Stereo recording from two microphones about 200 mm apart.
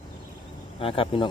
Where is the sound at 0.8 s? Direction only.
25° left (ahead or behind).